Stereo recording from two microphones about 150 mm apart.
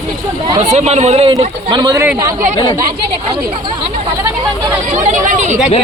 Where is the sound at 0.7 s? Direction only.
50° right (ahead or behind).